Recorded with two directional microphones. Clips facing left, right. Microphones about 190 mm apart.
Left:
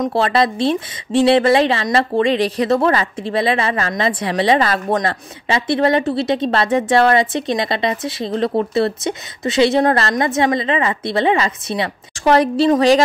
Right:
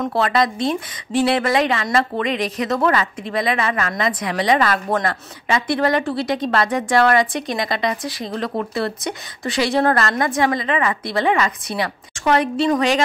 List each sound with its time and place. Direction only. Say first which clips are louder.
0.0 s speech: left 2 dB; 25° left (ahead or behind)
12.4 s a woman's voice: left 5 dB; 35° left (ahead or behind)